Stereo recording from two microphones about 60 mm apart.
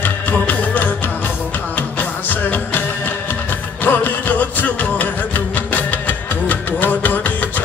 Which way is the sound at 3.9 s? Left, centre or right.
Left.